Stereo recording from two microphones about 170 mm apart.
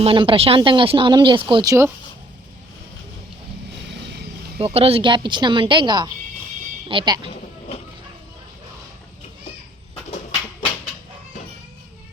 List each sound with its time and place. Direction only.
0.0 s speech: 30° right (ahead or behind)
4.6 s speech: 35° right (ahead or behind)